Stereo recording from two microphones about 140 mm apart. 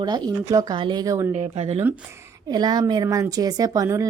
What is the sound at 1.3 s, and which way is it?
Speech, 50° right (ahead or behind).